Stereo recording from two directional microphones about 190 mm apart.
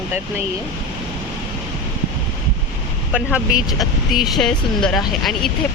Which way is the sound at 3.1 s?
5° right (ahead or behind).